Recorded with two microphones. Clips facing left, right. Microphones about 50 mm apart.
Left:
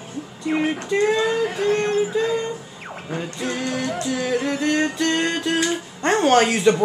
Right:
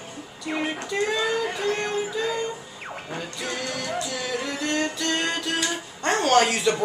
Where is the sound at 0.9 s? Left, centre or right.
Left.